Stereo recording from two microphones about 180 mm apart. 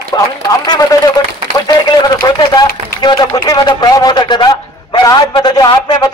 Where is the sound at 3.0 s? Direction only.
25° left (ahead or behind).